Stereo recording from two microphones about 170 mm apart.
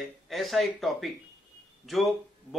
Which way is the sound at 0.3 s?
Centre (ahead or behind).